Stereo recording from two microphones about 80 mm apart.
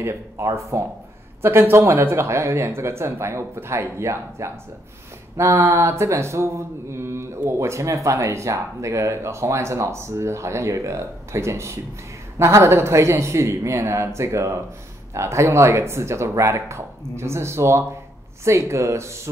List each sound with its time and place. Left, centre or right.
0.0 s speech: right